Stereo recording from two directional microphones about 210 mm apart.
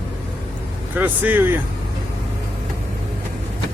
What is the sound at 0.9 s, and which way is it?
Speech, 10° right (ahead or behind).